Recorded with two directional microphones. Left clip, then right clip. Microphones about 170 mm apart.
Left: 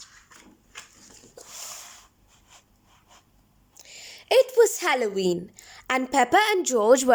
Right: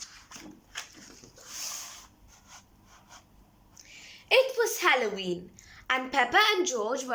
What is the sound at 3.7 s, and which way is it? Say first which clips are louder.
A woman's voice: left 5 dB; 30° left (ahead or behind).